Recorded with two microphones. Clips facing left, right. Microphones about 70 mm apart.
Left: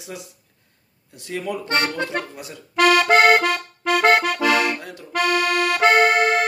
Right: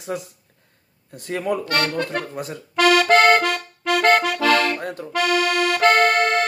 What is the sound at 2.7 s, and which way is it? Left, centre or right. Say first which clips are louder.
Accordion: even; centre.